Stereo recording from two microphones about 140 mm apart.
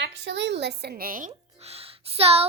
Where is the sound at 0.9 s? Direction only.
90° right.